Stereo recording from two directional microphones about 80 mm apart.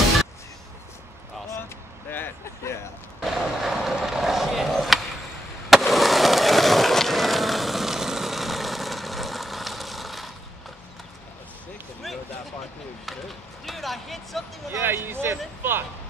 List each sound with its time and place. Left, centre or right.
2.0 s vehicle: left
3.3 s skateboard: centre
13.0 s chop: centre
14.7 s a sound: right